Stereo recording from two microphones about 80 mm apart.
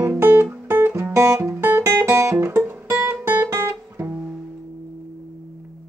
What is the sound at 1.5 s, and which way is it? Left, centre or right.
Music, right.